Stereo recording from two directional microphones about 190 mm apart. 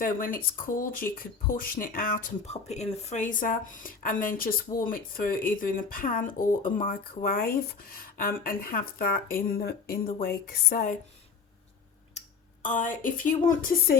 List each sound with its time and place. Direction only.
0.0 s speech: 45° left (ahead or behind)
12.6 s speech: 45° left (ahead or behind)